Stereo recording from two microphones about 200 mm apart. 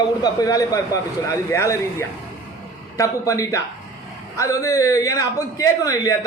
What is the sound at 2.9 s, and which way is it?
A man's voice, 15° left (ahead or behind).